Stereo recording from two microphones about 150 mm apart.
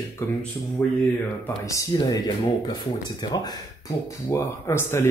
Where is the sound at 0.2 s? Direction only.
15° left (ahead or behind).